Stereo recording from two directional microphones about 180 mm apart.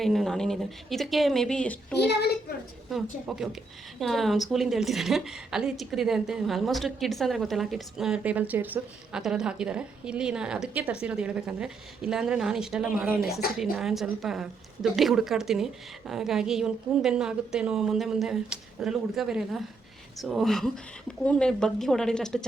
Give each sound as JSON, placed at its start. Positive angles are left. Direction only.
{"t": 0.0, "sound": "a woman's voice", "side_deg": 0}
{"t": 2.0, "sound": "a child's voice", "side_deg": 65}
{"t": 2.9, "sound": "a woman's voice", "side_deg": 0}